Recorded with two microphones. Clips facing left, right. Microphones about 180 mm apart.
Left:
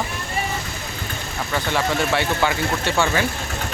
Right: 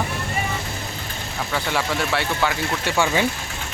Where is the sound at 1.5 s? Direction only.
5° right (ahead or behind).